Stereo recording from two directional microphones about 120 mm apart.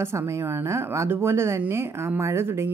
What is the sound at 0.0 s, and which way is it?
A woman's voice, 20° right (ahead or behind).